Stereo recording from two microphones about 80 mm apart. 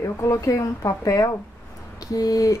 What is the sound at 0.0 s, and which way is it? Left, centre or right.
Speech, left.